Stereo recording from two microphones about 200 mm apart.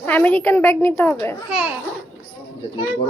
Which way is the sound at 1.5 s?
5° right (ahead or behind).